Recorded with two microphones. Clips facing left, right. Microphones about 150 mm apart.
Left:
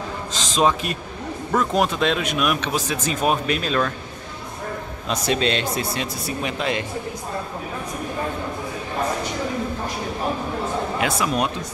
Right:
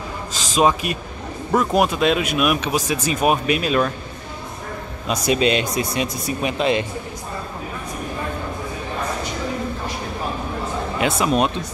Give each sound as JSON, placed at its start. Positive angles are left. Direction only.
{"t": 0.3, "sound": "a man's voice", "side_deg": -10}
{"t": 5.0, "sound": "speech", "side_deg": -10}
{"t": 11.0, "sound": "speech", "side_deg": -25}